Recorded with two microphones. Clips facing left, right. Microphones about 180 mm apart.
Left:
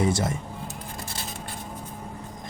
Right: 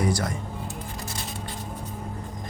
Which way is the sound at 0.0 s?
25° left (ahead or behind).